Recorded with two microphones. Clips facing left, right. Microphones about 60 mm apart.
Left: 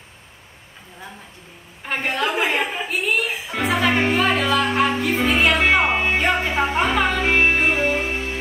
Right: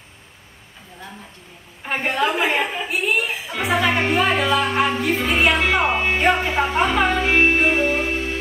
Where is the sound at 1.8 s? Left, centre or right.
Centre.